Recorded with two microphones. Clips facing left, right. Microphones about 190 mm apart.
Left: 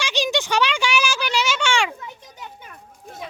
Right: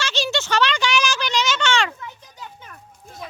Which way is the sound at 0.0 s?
15° left (ahead or behind).